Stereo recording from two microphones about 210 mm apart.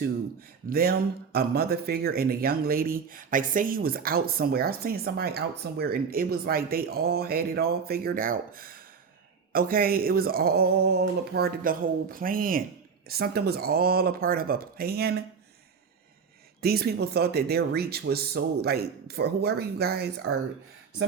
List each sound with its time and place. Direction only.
0.7 s speech: 45° right (ahead or behind)
16.6 s speech: 45° right (ahead or behind)
20.3 s speech: 90° right